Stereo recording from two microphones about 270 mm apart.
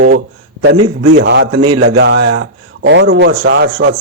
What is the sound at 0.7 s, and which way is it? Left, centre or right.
A man's voice, right.